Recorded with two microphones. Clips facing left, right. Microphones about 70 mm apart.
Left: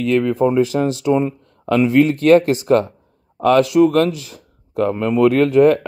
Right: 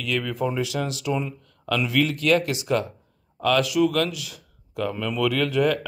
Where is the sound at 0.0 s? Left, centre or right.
Left.